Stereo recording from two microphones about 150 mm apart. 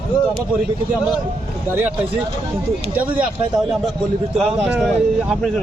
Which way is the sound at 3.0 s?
10° right (ahead or behind).